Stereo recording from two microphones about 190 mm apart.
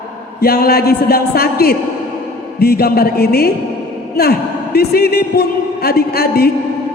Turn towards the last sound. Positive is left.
turn(degrees=55)  # may be behind; listen again after turning